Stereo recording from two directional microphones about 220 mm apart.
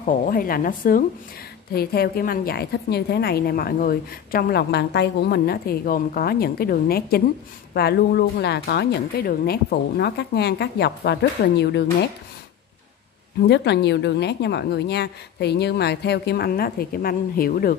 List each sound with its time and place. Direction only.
0.0 s a woman's voice: 40° left (ahead or behind)
13.5 s a woman's voice: 50° left (ahead or behind)